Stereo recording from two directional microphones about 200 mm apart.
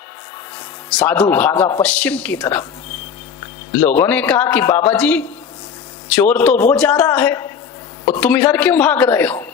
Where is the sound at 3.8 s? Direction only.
10° left (ahead or behind).